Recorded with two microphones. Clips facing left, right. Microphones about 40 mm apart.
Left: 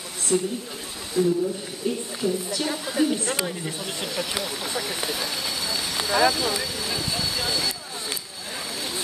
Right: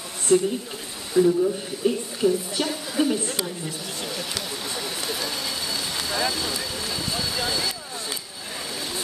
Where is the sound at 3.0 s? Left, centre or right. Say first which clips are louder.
Even; centre.